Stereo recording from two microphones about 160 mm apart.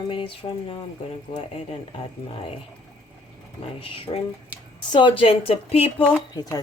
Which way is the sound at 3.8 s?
35° left (ahead or behind).